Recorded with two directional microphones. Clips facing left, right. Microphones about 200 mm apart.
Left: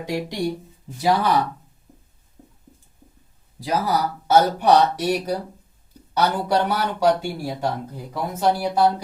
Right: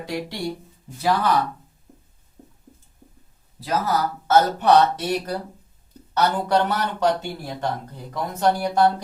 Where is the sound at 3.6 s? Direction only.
15° left (ahead or behind).